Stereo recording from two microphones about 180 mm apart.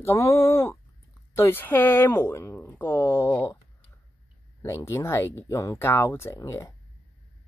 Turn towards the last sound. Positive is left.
turn(degrees=15)  # may be behind; listen again after turning